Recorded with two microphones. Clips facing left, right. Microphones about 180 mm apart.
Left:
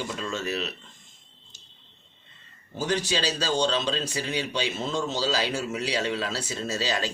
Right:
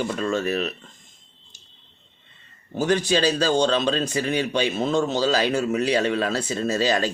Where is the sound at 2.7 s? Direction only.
55° right (ahead or behind).